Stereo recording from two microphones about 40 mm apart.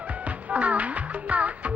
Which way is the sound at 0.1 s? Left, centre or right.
Right.